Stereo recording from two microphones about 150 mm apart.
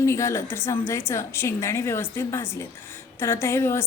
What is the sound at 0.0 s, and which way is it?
A woman's voice, 20° left (ahead or behind).